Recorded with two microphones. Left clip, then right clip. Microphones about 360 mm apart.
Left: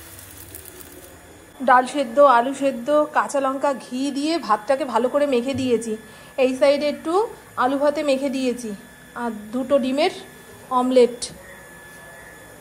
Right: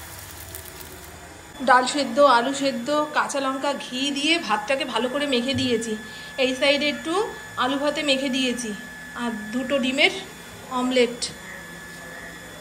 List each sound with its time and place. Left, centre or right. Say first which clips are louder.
1.6 s a woman's voice: left 2 dB; centre